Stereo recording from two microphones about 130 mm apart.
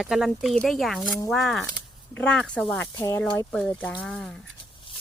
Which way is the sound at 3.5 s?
5° left (ahead or behind).